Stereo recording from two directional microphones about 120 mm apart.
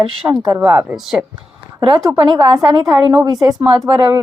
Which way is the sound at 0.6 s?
10° right (ahead or behind).